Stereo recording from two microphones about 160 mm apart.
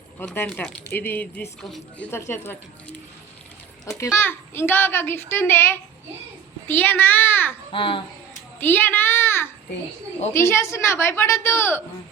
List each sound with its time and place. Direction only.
0.2 s a child's voice: 10° left (ahead or behind)
1.6 s speech: centre (ahead or behind)
2.0 s a child's voice: 15° left (ahead or behind)
3.9 s a child's voice: 15° left (ahead or behind)
7.7 s a child's voice: 30° left (ahead or behind)
8.5 s a child's voice: 10° left (ahead or behind)